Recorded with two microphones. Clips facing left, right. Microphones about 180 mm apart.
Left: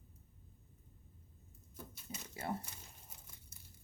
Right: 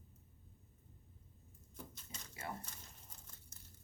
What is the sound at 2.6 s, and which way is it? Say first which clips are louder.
Crumpling: left 1 dB; 10° left (ahead or behind).